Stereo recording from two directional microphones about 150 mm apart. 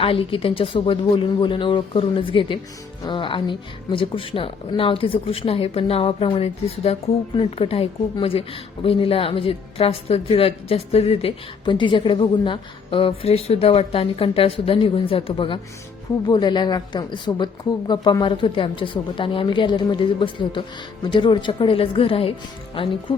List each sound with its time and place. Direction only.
0.0 s a woman's voice: 40° left (ahead or behind)